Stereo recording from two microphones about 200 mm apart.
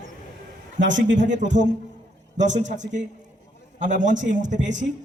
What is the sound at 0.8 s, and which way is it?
Speech, 65° right (ahead or behind).